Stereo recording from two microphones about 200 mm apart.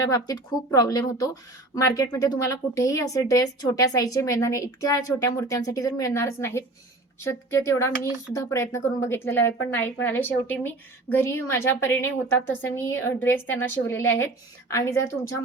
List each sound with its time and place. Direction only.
0.1 s speech: 15° left (ahead or behind)